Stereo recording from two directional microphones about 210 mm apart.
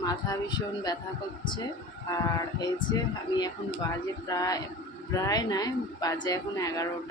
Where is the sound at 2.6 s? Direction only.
20° left (ahead or behind).